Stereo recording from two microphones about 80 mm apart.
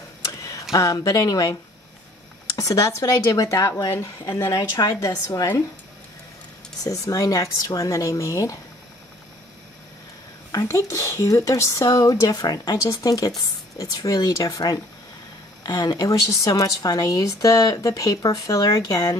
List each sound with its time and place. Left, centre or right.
0.7 s a woman's voice: left
4.7 s a woman's voice: left
6.8 s a woman's voice: left
10.5 s a woman's voice: left